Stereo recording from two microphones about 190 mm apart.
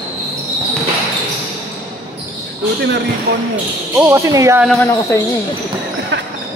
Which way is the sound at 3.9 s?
15° right (ahead or behind).